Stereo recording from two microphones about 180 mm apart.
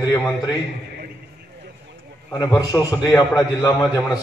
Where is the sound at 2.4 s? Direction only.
20° left (ahead or behind).